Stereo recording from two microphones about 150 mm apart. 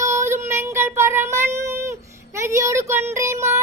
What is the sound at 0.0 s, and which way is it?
Child singing, 20° right (ahead or behind).